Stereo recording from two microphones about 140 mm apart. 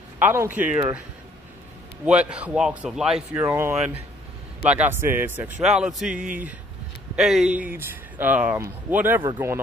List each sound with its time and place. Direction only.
0.2 s speech: 15° right (ahead or behind)
2.0 s speech: 10° right (ahead or behind)
3.3 s speech: 15° right (ahead or behind)
5.6 s a man's voice: 5° right (ahead or behind)